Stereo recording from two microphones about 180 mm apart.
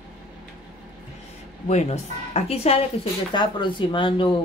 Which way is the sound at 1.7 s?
35° left (ahead or behind).